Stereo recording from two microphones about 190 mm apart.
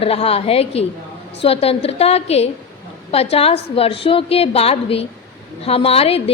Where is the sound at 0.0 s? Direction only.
30° left (ahead or behind).